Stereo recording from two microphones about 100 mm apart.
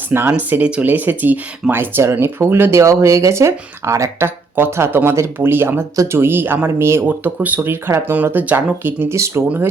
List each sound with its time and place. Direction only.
0.1 s speech: 20° right (ahead or behind)